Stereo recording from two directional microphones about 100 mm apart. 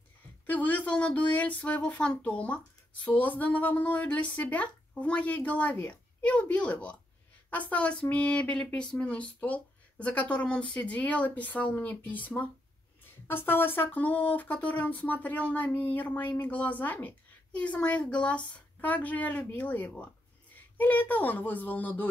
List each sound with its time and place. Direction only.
0.5 s speech: 15° left (ahead or behind)